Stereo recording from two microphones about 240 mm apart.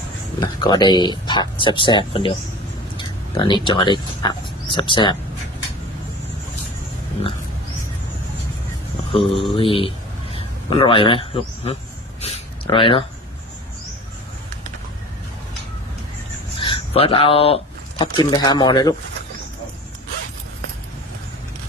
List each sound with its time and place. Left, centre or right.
0.3 s speech: centre
3.3 s speech: centre
9.6 s speech: left
12.2 s a sound: left
16.6 s speech: left